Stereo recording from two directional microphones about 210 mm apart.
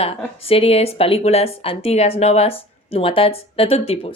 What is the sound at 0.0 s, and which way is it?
A woman's voice, 25° left (ahead or behind).